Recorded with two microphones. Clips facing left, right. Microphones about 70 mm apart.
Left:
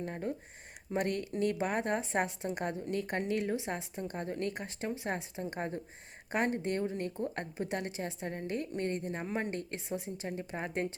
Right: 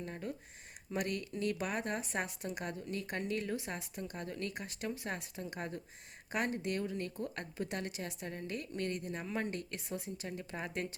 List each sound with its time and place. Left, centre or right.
0.0 s a woman's voice: left
3.8 s speech: left